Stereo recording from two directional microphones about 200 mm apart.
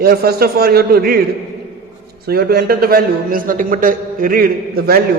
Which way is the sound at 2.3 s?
50° right (ahead or behind).